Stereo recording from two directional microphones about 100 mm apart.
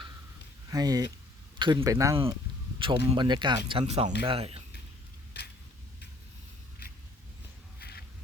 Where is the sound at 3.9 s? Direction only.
70° right (ahead or behind).